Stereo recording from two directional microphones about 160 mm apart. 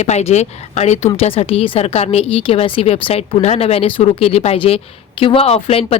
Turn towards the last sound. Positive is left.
turn(degrees=40)  # may be behind; listen again after turning